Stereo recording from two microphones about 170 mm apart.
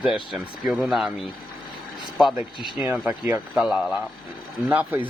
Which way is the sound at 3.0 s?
10° right (ahead or behind).